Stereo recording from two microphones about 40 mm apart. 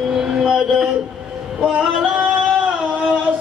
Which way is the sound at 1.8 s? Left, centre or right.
Right.